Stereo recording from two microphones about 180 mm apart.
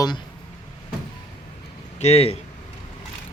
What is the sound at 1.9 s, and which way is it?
Speech, 35° left (ahead or behind).